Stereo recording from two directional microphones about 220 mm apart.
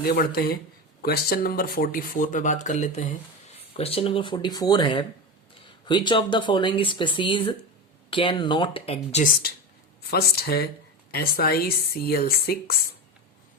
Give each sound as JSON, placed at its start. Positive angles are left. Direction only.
{"t": 0.0, "sound": "speech", "side_deg": 40}
{"t": 10.1, "sound": "speech", "side_deg": 45}